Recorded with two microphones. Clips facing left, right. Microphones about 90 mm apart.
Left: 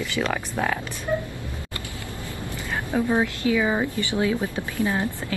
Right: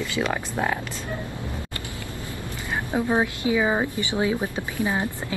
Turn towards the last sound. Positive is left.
turn(degrees=-20)  # may be behind; listen again after turning